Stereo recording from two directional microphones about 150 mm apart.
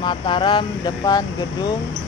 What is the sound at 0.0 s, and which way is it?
Speech, 35° left (ahead or behind).